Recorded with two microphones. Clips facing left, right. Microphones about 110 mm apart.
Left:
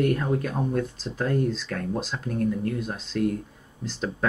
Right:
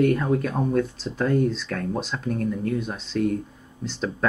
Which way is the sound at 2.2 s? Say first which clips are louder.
Left 1 dB; 60° right (ahead or behind).